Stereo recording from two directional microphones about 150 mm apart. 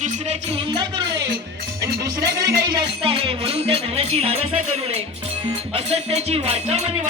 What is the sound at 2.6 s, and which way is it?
Music, 30° right (ahead or behind).